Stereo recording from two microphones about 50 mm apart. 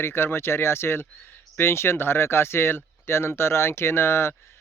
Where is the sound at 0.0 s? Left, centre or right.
Left.